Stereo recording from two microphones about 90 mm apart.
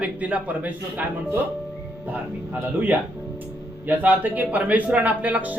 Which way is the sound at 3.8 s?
20° right (ahead or behind).